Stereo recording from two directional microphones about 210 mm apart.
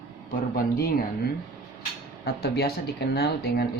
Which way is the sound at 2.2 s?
50° left (ahead or behind).